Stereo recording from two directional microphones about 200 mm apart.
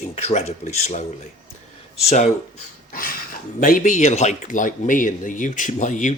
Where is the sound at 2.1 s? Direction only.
35° left (ahead or behind).